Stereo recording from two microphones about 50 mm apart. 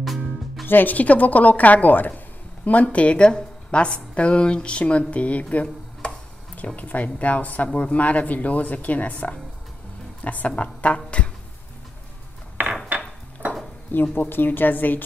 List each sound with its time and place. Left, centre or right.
0.0 s music: centre
0.7 s a woman's voice: left
12.6 s a sound: right
13.9 s speech: left